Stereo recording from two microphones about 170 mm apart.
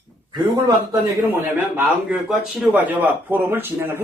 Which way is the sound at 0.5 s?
20° right (ahead or behind).